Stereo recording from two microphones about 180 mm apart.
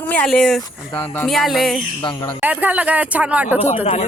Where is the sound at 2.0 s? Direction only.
25° left (ahead or behind).